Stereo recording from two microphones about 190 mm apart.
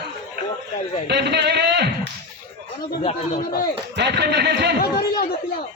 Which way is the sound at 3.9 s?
60° right (ahead or behind).